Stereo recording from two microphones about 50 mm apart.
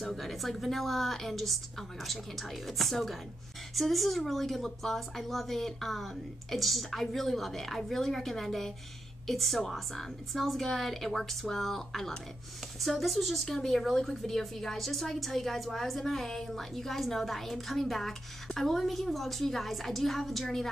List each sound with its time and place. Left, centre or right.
0.0 s speech: centre